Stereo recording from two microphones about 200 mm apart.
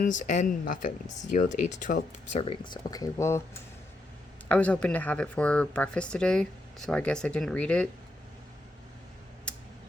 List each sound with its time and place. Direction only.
0.0 s speech: 40° left (ahead or behind)
2.9 s speech: 15° left (ahead or behind)
4.4 s speech: 5° left (ahead or behind)